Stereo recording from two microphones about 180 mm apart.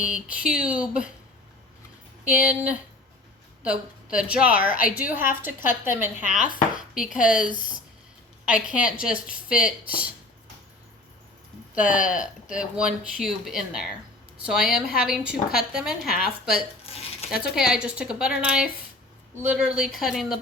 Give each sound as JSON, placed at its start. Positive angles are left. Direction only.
{"t": 0.0, "sound": "speech", "side_deg": -5}
{"t": 2.2, "sound": "a woman's voice", "side_deg": -5}
{"t": 4.7, "sound": "a woman's voice", "side_deg": 50}
{"t": 4.9, "sound": "speech", "side_deg": -10}
{"t": 11.7, "sound": "speech", "side_deg": -5}
{"t": 16.8, "sound": "a sound", "side_deg": 35}
{"t": 17.3, "sound": "speech", "side_deg": -5}